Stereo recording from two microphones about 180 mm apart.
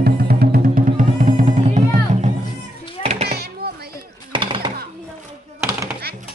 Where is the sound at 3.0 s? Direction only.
35° right (ahead or behind).